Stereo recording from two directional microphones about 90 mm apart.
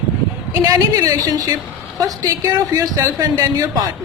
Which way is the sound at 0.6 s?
50° right (ahead or behind).